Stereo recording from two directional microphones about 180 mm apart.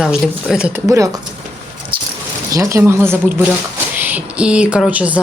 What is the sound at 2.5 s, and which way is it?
A woman's voice, 15° right (ahead or behind).